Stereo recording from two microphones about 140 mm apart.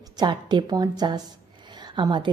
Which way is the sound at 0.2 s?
30° right (ahead or behind).